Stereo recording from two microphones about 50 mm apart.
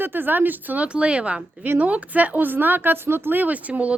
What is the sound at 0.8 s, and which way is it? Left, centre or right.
A woman's voice, right.